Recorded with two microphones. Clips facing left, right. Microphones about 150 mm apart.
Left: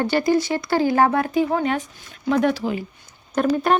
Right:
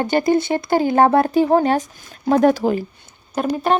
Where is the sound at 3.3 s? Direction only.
5° right (ahead or behind).